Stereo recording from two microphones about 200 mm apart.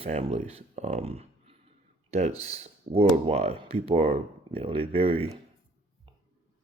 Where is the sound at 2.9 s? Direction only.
30° right (ahead or behind).